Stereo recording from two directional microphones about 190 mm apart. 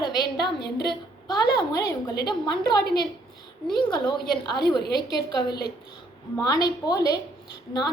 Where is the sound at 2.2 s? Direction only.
20° left (ahead or behind).